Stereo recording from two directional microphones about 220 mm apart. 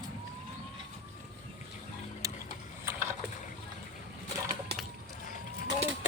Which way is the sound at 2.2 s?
15° right (ahead or behind).